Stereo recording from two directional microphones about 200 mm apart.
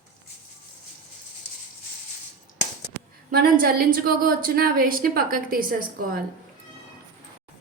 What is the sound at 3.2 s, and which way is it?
A woman's voice, 50° right (ahead or behind).